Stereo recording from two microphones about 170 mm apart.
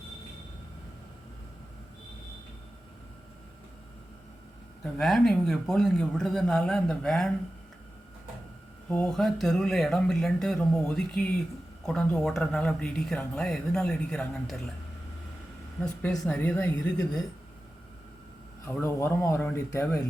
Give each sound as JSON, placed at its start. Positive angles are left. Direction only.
{"t": 4.8, "sound": "speech", "side_deg": 0}
{"t": 8.9, "sound": "speech", "side_deg": 5}
{"t": 15.8, "sound": "speech", "side_deg": 5}
{"t": 17.0, "sound": "speech", "side_deg": 20}
{"t": 18.6, "sound": "speech", "side_deg": 15}